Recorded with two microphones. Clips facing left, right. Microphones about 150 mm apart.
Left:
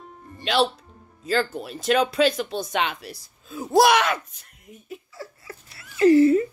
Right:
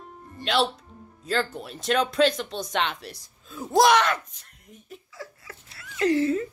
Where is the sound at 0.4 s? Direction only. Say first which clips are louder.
Left 2 dB; centre (ahead or behind).